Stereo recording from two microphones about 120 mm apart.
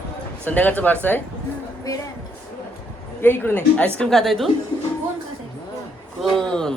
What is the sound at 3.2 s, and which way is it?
Speech, 15° left (ahead or behind).